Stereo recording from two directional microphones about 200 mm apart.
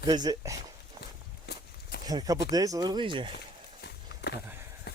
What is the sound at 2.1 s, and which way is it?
Speech, 20° right (ahead or behind).